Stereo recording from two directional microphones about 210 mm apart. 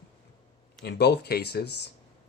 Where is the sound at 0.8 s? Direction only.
55° left (ahead or behind).